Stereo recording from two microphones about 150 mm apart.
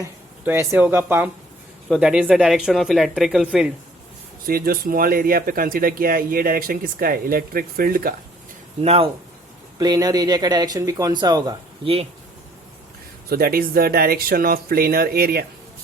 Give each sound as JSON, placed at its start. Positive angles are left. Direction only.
{"t": 0.4, "sound": "speech", "side_deg": -15}
{"t": 4.4, "sound": "speech", "side_deg": -80}
{"t": 8.8, "sound": "speech", "side_deg": -45}
{"t": 9.7, "sound": "speech", "side_deg": -25}
{"t": 13.3, "sound": "speech", "side_deg": -80}